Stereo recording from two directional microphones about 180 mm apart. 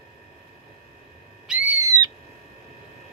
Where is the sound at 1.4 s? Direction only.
5° right (ahead or behind).